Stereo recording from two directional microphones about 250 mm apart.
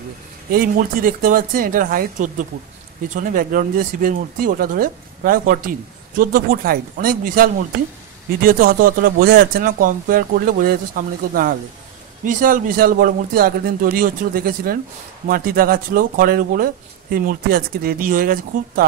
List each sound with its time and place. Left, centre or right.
0.5 s speech: right